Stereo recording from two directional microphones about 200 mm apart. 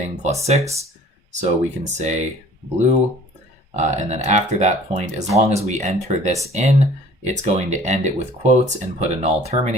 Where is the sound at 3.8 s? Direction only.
35° right (ahead or behind).